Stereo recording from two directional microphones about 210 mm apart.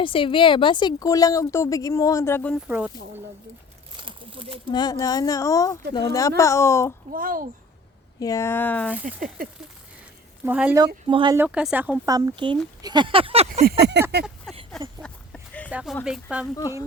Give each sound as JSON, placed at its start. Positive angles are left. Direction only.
{"t": 0.0, "sound": "a woman's voice", "side_deg": 25}
{"t": 2.6, "sound": "speech", "side_deg": -5}
{"t": 3.9, "sound": "crumpling", "side_deg": -25}
{"t": 4.7, "sound": "a woman's voice", "side_deg": 20}
{"t": 7.1, "sound": "speech", "side_deg": -40}
{"t": 8.2, "sound": "a woman's voice", "side_deg": 15}
{"t": 9.0, "sound": "speech", "side_deg": -40}
{"t": 10.4, "sound": "speech", "side_deg": -5}
{"t": 10.8, "sound": "speech", "side_deg": -20}
{"t": 11.3, "sound": "speech", "side_deg": -5}
{"t": 12.0, "sound": "speech", "side_deg": -15}
{"t": 13.7, "sound": "a sound", "side_deg": -50}
{"t": 14.5, "sound": "a sound", "side_deg": 0}
{"t": 15.7, "sound": "speech", "side_deg": -5}